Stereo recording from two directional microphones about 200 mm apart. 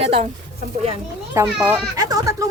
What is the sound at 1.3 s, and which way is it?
A child's voice, 10° right (ahead or behind).